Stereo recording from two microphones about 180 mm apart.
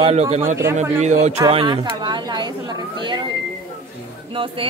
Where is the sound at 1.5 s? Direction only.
25° right (ahead or behind).